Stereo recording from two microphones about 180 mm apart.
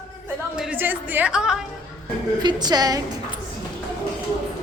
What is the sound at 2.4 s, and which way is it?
Speech, 25° right (ahead or behind).